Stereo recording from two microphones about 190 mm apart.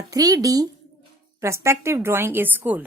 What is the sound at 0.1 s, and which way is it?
A woman's voice, 20° right (ahead or behind).